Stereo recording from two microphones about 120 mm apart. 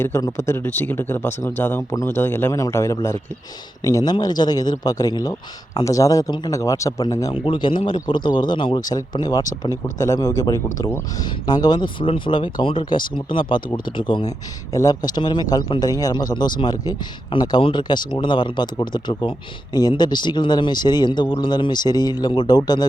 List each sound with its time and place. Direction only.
0.0 s speech: 25° left (ahead or behind)
7.3 s speech: 45° left (ahead or behind); by 11.0 s 25° left (ahead or behind)
11.2 s speech: 35° left (ahead or behind)
14.7 s speech: 30° left (ahead or behind)